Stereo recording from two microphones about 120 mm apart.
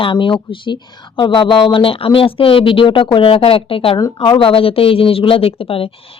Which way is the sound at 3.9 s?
35° left (ahead or behind).